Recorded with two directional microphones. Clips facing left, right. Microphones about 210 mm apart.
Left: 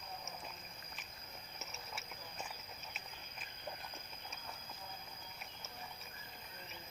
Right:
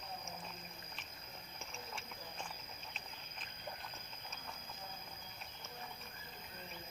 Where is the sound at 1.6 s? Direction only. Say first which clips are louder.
Right 2 dB; 5° left (ahead or behind).